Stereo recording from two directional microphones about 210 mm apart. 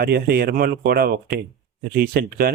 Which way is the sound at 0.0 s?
45° right (ahead or behind).